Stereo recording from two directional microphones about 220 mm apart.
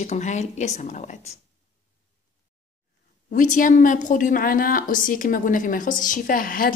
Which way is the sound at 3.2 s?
35° left (ahead or behind).